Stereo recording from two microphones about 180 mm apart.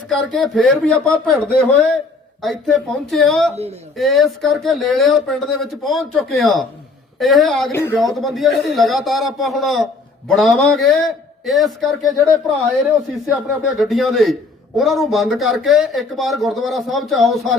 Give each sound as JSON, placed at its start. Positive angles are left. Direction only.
{"t": 0.1, "sound": "a man's voice", "side_deg": 0}
{"t": 3.5, "sound": "speech", "side_deg": -35}
{"t": 3.9, "sound": "a man's voice", "side_deg": 0}
{"t": 7.7, "sound": "speech", "side_deg": 15}
{"t": 8.2, "sound": "a man's voice", "side_deg": 0}